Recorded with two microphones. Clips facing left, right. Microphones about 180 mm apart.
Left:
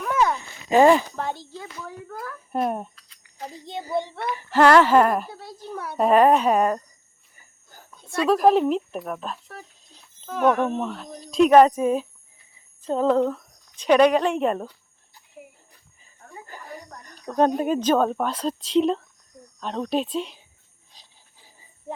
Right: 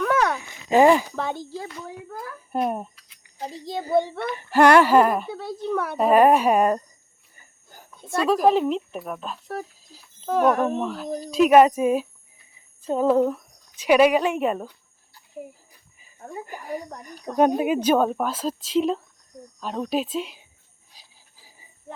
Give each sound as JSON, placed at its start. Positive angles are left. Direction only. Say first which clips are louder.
{"t": 0.0, "sound": "a sound", "louder": "right 1 dB", "side_deg": -80}
{"t": 0.8, "sound": "speech", "louder": "even", "side_deg": -10}
{"t": 2.1, "sound": "speech", "louder": "even", "side_deg": 0}
{"t": 3.8, "sound": "a child's voice", "louder": "right 6 dB", "side_deg": -55}
{"t": 4.5, "sound": "speech", "louder": "even", "side_deg": -10}
{"t": 5.3, "sound": "a child's voice", "louder": "right 9 dB", "side_deg": -70}
{"t": 6.0, "sound": "speech", "louder": "even", "side_deg": -5}
{"t": 7.7, "sound": "a sound", "louder": "right 3 dB", "side_deg": -15}
{"t": 8.1, "sound": "speech", "louder": "left 1 dB", "side_deg": 0}
{"t": 10.2, "sound": "speech", "louder": "right 1 dB", "side_deg": -40}
{"t": 10.8, "sound": "a woman's voice", "louder": "right 3 dB", "side_deg": 0}
{"t": 15.7, "sound": "a sound", "louder": "right 1 dB", "side_deg": -10}
{"t": 16.5, "sound": "speech", "louder": "right 7 dB", "side_deg": -10}
{"t": 20.9, "sound": "a sound", "louder": "even", "side_deg": -10}